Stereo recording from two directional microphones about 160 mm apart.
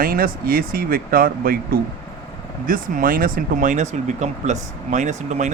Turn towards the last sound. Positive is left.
turn(degrees=-45)  # may be behind; listen again after turning